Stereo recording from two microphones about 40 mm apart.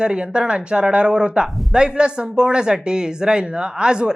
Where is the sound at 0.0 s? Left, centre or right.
Right.